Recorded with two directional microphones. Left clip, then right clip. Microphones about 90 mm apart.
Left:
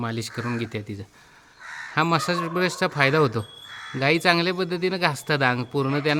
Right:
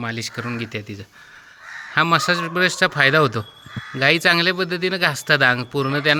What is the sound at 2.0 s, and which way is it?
Speech, 15° left (ahead or behind).